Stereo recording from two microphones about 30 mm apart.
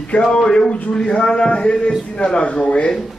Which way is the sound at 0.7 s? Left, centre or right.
Left.